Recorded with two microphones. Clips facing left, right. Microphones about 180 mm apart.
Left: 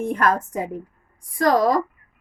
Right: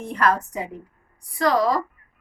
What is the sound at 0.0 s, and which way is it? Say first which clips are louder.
A woman's voice: left 1 dB; 50° left (ahead or behind).